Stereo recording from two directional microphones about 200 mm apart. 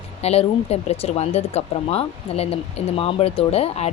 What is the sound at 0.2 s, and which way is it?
Speech, 30° left (ahead or behind).